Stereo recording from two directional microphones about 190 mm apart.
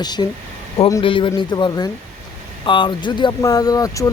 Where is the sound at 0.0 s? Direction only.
20° left (ahead or behind).